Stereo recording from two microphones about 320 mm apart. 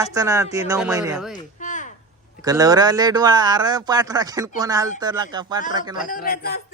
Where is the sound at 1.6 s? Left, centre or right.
Left.